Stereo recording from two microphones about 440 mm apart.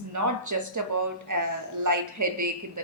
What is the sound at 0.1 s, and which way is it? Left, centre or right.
A woman's voice, right.